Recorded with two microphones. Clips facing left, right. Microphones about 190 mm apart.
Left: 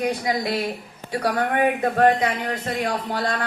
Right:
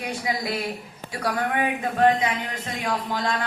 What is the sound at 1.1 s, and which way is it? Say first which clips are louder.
Speech: left 3 dB; 45° left (ahead or behind).